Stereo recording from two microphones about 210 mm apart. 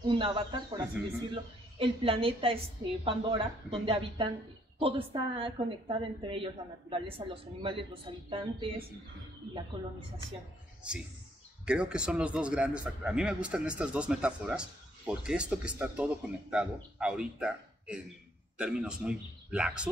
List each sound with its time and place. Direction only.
0.0 s a woman's voice: 25° right (ahead or behind)
11.6 s a man's voice: 5° right (ahead or behind)